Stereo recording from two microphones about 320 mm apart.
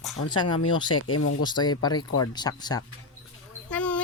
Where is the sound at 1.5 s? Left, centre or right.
Centre.